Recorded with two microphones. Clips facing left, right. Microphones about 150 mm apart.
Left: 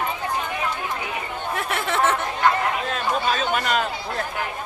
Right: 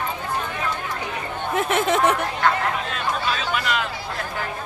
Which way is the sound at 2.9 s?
45° left (ahead or behind).